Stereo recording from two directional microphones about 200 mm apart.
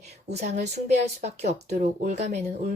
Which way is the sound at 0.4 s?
35° right (ahead or behind).